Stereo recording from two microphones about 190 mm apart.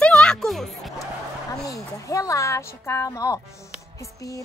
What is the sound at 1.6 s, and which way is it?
A woman's voice, 15° left (ahead or behind).